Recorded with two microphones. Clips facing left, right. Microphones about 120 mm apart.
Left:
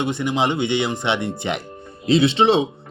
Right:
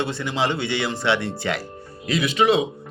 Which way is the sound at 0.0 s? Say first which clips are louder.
Left 3 dB; 20° left (ahead or behind).